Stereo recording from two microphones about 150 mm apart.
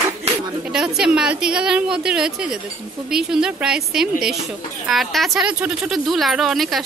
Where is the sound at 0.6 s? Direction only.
5° right (ahead or behind).